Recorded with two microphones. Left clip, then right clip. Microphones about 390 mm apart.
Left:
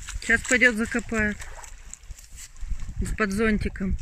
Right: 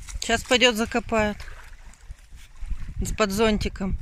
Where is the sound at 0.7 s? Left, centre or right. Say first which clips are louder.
Right 2 dB; right.